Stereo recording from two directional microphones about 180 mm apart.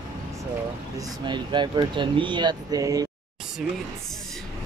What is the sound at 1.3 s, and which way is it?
Speech, 25° right (ahead or behind).